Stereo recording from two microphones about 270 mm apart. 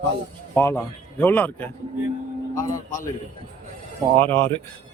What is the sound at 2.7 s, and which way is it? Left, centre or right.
Speech, left.